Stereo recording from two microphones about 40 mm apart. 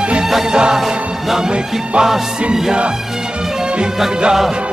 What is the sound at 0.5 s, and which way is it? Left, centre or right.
Music, right.